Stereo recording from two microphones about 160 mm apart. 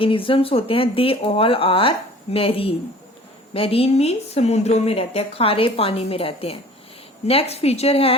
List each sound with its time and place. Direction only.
0.0 s speech: 35° left (ahead or behind)